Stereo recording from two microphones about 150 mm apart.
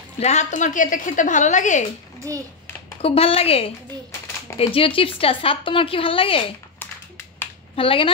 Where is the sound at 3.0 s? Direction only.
40° left (ahead or behind).